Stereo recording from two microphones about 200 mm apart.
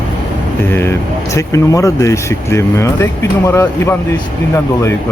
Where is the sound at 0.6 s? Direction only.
10° left (ahead or behind).